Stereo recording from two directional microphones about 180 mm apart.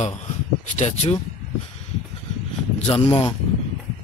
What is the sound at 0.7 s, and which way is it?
Speech, 40° left (ahead or behind).